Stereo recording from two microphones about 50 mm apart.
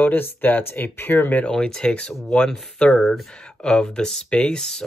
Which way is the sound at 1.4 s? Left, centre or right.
Centre.